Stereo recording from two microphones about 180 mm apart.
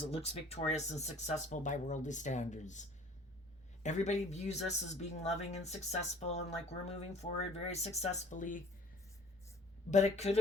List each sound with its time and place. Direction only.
0.1 s speech: 35° left (ahead or behind)
3.8 s speech: 40° left (ahead or behind)
9.9 s speech: 40° left (ahead or behind)